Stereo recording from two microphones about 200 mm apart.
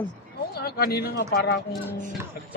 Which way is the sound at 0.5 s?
50° left (ahead or behind).